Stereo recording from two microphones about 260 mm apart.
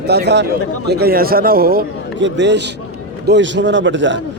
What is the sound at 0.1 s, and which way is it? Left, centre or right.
Speech, right.